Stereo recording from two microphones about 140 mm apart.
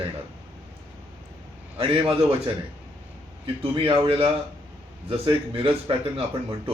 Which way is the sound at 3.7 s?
40° right (ahead or behind).